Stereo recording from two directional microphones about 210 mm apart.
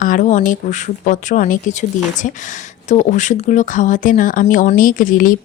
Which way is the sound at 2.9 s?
35° left (ahead or behind).